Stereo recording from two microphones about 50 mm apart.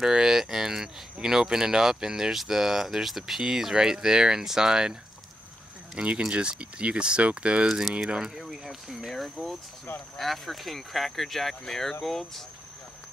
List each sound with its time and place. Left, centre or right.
0.0 s speech: centre
5.9 s speech: centre
7.6 s speech: centre